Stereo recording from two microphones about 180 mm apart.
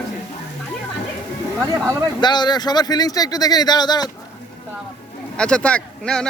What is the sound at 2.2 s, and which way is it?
Speech, 25° left (ahead or behind).